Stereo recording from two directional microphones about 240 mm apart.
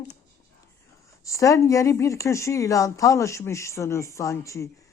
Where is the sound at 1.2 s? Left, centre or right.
Centre.